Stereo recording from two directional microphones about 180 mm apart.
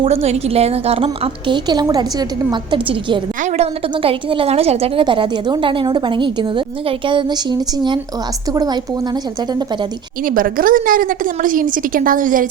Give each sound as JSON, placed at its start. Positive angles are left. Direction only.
{"t": 0.0, "sound": "a woman's voice", "side_deg": -35}
{"t": 10.2, "sound": "a woman's voice", "side_deg": -50}